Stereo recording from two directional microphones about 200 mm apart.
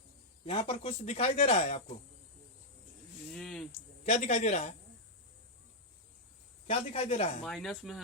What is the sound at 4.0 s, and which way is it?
Speech, 35° left (ahead or behind).